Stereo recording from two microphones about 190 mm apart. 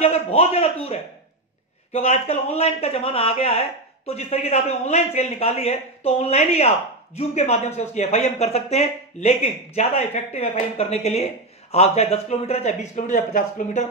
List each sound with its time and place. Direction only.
0.0 s a man's voice: 30° left (ahead or behind)